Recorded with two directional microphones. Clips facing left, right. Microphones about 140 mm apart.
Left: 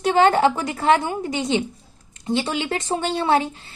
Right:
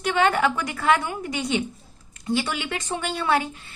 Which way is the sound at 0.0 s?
30° left (ahead or behind).